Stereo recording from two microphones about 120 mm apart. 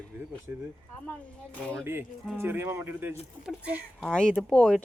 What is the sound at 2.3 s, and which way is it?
Speech, 20° right (ahead or behind).